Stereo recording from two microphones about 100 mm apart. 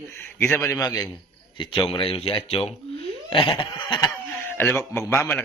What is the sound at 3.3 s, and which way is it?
Goat, 60° left (ahead or behind).